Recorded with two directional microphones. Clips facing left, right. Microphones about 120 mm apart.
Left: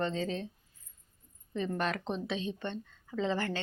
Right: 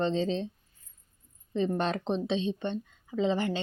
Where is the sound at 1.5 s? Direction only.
25° right (ahead or behind).